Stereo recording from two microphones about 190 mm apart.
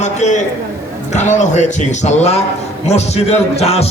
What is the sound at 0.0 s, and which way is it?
A man's voice, 40° left (ahead or behind).